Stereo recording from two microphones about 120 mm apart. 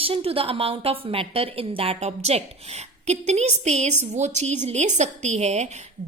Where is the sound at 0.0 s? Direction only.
50° right (ahead or behind).